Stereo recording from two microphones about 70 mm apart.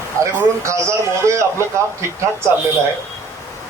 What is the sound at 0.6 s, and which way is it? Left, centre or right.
A man's voice, right.